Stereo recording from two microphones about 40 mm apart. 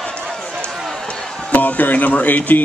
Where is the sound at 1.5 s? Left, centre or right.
Left.